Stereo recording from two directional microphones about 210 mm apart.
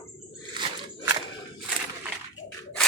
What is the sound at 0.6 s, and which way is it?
Crunch, 15° right (ahead or behind).